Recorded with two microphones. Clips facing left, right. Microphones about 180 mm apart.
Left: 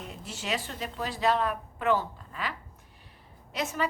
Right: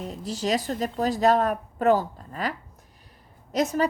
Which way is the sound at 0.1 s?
35° right (ahead or behind).